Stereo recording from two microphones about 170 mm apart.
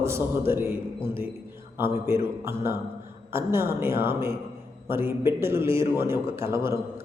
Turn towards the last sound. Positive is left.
turn(degrees=-15)  # may be behind; listen again after turning